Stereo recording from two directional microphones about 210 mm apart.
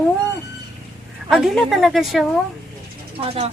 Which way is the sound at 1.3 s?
Centre (ahead or behind).